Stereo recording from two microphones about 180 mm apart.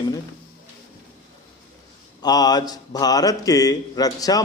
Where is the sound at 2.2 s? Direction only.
20° left (ahead or behind).